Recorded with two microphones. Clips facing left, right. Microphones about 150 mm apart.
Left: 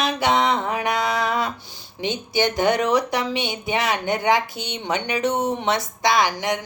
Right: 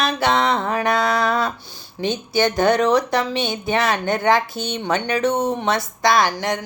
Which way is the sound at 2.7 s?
40° right (ahead or behind).